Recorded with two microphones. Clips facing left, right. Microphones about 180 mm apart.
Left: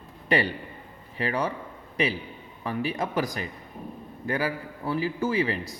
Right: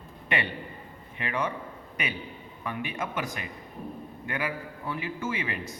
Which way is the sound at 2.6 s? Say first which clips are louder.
Left 5 dB; 35° left (ahead or behind).